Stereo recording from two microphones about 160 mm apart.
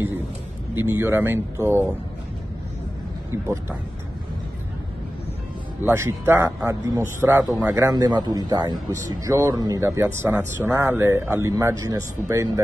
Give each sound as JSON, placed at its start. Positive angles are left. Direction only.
{"t": 0.7, "sound": "speech", "side_deg": -15}
{"t": 5.8, "sound": "a man's voice", "side_deg": -15}